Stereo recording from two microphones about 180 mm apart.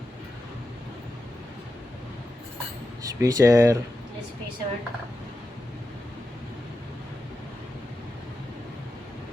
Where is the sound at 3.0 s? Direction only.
20° right (ahead or behind).